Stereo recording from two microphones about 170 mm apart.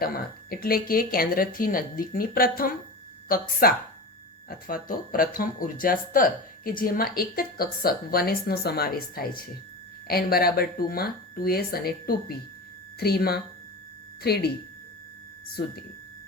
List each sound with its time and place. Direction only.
0.0 s a woman's voice: 65° left (ahead or behind)
15.6 s speech: 65° left (ahead or behind)